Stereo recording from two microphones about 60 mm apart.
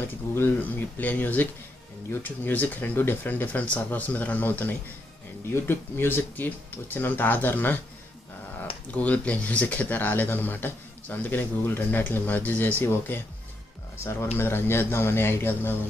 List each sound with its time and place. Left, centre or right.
0.6 s speech: left
8.9 s speech: left
13.9 s speech: left